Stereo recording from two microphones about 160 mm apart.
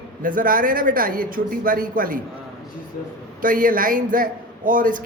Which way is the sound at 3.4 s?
60° right (ahead or behind).